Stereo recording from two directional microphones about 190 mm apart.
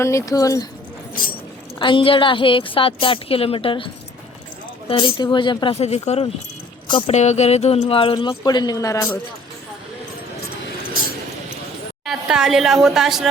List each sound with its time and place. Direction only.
0.0 s speech: 15° left (ahead or behind)
1.8 s a woman's voice: 25° left (ahead or behind)
12.0 s a woman's voice: centre (ahead or behind)